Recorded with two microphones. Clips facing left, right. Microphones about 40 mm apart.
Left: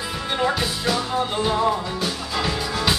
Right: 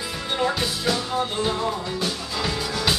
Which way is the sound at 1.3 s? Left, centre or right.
Centre.